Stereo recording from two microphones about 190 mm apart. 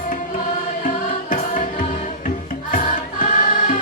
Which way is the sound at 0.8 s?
45° left (ahead or behind).